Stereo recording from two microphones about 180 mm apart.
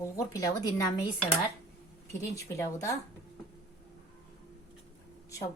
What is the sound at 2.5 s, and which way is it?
Speech, 15° left (ahead or behind).